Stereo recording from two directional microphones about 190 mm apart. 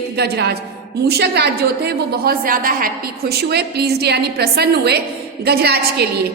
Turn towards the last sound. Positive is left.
turn(degrees=-55)  # may be behind; listen again after turning